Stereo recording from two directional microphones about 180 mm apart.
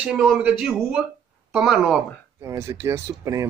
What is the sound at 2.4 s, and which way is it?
Speech, 15° right (ahead or behind).